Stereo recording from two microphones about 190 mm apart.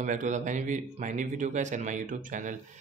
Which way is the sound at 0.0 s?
40° right (ahead or behind).